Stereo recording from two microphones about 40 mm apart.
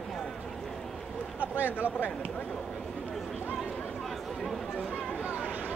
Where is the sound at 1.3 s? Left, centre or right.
Right.